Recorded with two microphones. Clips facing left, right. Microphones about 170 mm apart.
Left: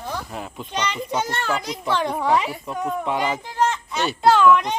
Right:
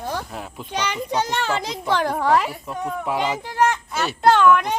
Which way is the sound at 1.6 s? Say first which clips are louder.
Right 1 dB; 25° right (ahead or behind).